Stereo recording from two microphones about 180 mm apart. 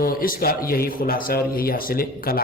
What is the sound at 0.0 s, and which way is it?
Speech, 55° left (ahead or behind).